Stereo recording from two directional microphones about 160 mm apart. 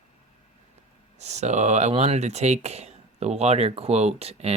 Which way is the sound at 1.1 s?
45° right (ahead or behind).